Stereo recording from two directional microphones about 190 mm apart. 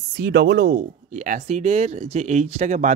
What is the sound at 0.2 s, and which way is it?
Speech, 60° right (ahead or behind).